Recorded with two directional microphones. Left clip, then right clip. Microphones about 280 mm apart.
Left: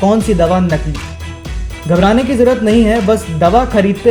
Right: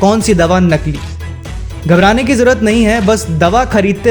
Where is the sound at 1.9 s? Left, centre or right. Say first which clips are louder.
Right 2 dB; right.